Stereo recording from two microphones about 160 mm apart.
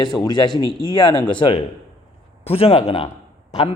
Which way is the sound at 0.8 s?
30° left (ahead or behind).